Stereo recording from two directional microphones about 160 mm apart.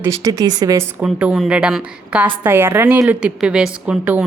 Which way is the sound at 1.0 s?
5° right (ahead or behind).